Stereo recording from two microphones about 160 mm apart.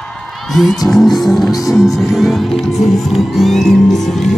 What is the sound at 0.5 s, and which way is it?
Music, centre (ahead or behind).